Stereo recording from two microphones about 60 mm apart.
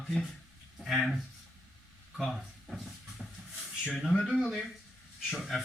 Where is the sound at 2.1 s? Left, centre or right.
Centre.